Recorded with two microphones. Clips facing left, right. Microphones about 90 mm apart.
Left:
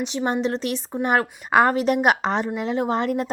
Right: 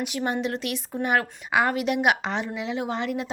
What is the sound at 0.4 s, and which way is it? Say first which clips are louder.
A woman's voice: left 4 dB; 35° left (ahead or behind).